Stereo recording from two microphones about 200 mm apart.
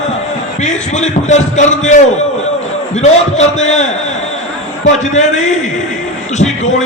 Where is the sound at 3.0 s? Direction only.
35° left (ahead or behind).